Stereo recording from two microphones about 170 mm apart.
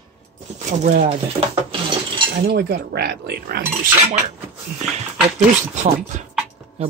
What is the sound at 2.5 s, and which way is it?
Speech, 70° right (ahead or behind).